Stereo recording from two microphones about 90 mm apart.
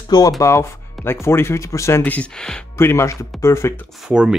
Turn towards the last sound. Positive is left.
turn(degrees=-10)  # may be behind; listen again after turning